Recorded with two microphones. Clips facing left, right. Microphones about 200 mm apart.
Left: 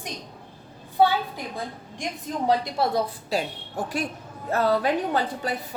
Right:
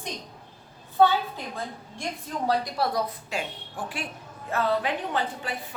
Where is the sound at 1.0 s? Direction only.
15° left (ahead or behind).